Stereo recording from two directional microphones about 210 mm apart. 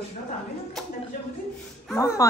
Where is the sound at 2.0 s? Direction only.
15° left (ahead or behind).